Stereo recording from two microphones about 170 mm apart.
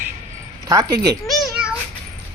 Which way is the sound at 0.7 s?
20° right (ahead or behind).